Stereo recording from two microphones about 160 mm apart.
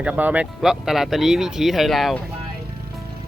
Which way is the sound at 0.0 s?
10° right (ahead or behind).